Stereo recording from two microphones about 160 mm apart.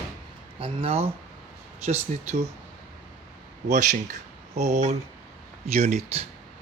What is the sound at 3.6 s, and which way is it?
Speech, 50° right (ahead or behind).